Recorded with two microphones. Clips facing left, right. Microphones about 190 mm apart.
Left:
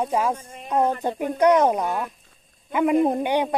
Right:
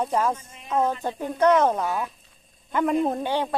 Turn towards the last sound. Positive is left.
turn(degrees=15)  # may be behind; listen again after turning